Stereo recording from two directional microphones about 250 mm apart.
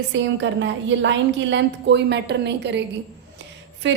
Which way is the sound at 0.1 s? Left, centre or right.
Right.